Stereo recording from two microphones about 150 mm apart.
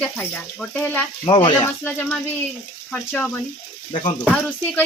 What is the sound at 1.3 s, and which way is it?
Speech, 35° left (ahead or behind).